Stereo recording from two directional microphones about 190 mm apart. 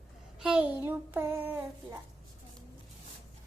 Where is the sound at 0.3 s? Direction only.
5° right (ahead or behind).